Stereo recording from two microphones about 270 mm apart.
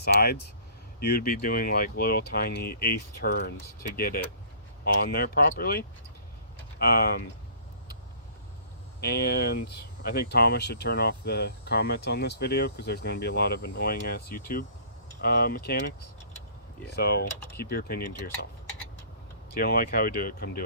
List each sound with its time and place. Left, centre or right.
0.0 s speech: left
9.0 s speech: left
19.5 s speech: left